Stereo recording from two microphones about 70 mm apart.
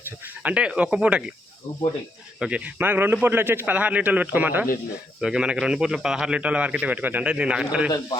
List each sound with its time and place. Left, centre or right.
0.4 s a man's voice: centre
2.4 s a man's voice: centre
2.7 s speech: right
5.2 s a man's voice: centre
7.9 s speech: left